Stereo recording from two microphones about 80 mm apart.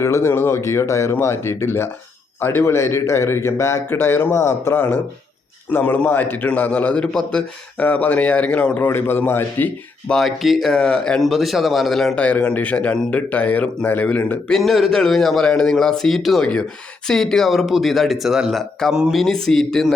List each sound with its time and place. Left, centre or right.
0.0 s a man's voice: left
5.8 s a man's voice: centre
10.1 s speech: centre
11.2 s a man's voice: centre
12.1 s a man's voice: centre
14.4 s a man's voice: centre
19.2 s a man's voice: centre